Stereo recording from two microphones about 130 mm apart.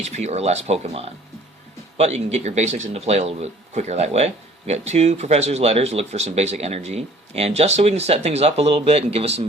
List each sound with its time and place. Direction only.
0.0 s a man's voice: 60° right (ahead or behind)